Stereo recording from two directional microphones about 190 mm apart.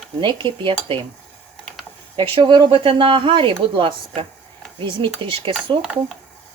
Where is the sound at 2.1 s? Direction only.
25° right (ahead or behind).